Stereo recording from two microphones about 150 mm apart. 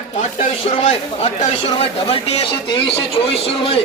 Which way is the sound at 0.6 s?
45° left (ahead or behind).